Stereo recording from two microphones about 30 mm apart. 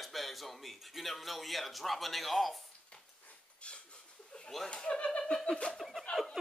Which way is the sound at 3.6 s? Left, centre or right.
Left.